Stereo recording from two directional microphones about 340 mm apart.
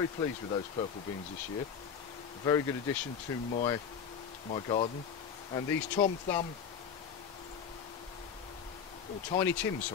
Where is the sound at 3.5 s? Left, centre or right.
Centre.